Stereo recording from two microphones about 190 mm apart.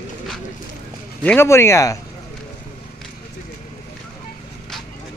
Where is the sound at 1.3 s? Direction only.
15° left (ahead or behind).